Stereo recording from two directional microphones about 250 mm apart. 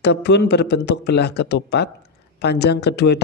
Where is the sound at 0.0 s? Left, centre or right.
Left.